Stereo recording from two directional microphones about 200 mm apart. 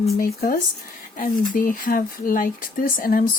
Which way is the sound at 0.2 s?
45° left (ahead or behind).